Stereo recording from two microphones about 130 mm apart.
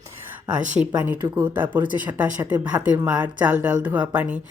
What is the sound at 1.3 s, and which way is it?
Speech, 15° right (ahead or behind).